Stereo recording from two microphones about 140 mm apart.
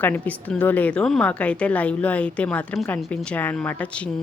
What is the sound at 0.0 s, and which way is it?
A woman's voice, 10° left (ahead or behind).